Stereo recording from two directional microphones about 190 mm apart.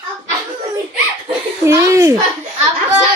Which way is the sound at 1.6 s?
15° right (ahead or behind).